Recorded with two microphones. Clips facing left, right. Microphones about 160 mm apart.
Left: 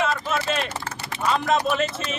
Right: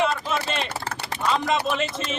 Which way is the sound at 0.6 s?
60° right (ahead or behind).